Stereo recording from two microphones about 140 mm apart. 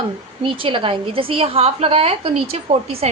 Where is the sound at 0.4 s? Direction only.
40° right (ahead or behind).